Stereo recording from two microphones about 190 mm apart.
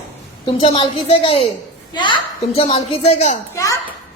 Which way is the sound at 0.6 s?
30° left (ahead or behind).